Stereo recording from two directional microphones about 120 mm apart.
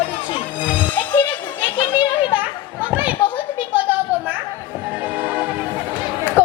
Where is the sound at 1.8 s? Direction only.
45° left (ahead or behind).